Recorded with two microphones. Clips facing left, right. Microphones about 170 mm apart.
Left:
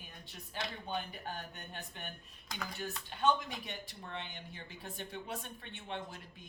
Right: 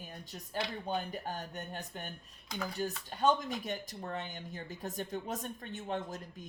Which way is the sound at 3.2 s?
45° right (ahead or behind).